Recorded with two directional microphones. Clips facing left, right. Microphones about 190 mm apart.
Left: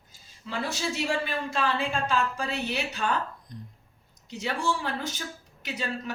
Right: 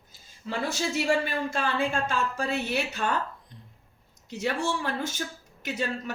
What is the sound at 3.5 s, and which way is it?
Speech, 40° left (ahead or behind).